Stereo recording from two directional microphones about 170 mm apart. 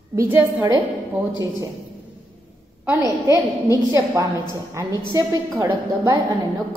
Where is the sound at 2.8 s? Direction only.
20° right (ahead or behind).